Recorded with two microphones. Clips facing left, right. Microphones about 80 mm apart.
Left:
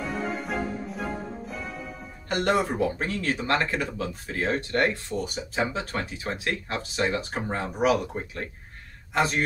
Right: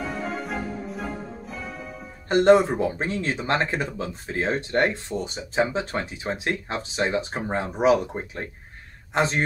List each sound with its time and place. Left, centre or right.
0.0 s music: centre
2.2 s speech: right